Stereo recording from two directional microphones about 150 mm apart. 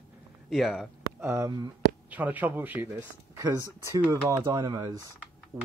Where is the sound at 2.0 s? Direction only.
10° right (ahead or behind).